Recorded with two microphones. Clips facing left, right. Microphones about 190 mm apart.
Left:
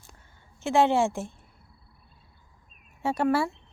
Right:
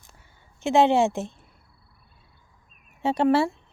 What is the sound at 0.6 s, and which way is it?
Speech, 20° right (ahead or behind).